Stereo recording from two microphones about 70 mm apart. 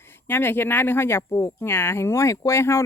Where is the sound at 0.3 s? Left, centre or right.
Left.